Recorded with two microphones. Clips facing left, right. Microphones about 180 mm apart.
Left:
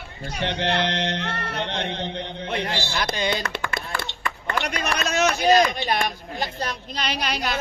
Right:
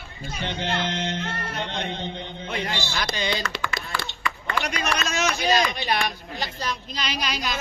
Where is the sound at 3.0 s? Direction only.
55° left (ahead or behind).